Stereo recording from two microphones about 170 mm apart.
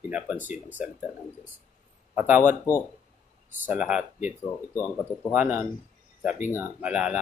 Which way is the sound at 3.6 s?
5° right (ahead or behind).